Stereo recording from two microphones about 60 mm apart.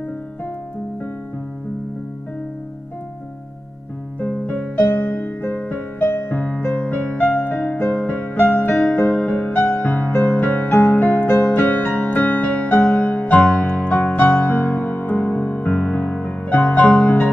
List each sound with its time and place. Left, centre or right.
4.2 s music: left